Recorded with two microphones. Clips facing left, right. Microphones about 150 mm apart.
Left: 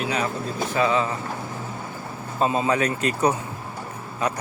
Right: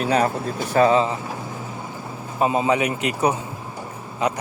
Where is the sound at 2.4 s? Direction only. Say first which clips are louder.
Right 2 dB; 15° right (ahead or behind).